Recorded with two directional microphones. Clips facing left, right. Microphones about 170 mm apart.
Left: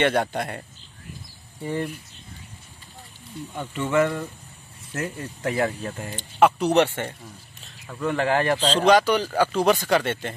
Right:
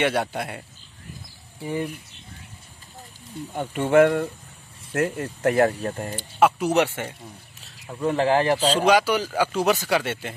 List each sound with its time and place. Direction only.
0.0 s speech: 5° right (ahead or behind)
3.7 s speech: 60° right (ahead or behind); by 6.1 s 40° right (ahead or behind)
6.1 s speech: 5° right (ahead or behind)
8.0 s speech: 30° right (ahead or behind)
8.5 s speech: 10° right (ahead or behind)